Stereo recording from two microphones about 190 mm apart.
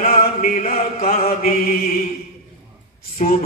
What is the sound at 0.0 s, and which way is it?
Chant, 30° left (ahead or behind).